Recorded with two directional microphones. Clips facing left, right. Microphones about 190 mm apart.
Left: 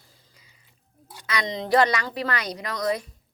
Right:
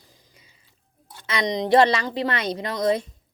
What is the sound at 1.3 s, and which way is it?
Speech, 20° right (ahead or behind).